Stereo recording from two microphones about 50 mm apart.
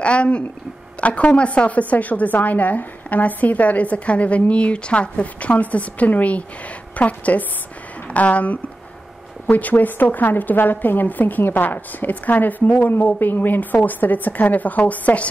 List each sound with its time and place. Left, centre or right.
0.0 s a woman's voice: left